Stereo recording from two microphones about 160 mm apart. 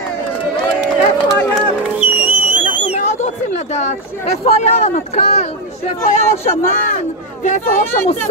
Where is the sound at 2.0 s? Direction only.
10° right (ahead or behind).